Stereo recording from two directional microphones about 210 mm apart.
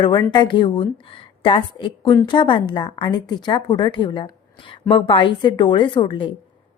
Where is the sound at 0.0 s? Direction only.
20° left (ahead or behind).